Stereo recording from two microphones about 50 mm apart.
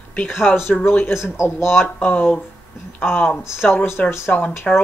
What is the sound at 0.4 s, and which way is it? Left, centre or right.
Speech, left.